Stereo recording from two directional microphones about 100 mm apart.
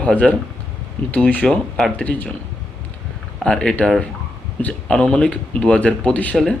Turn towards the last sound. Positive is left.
turn(degrees=15)  # may be behind; listen again after turning